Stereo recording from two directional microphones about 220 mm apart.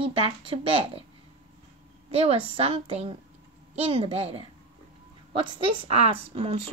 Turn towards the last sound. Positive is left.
turn(degrees=-25)  # may be behind; listen again after turning